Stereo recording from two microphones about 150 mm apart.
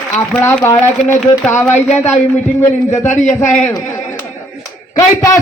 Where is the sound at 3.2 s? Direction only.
55° left (ahead or behind).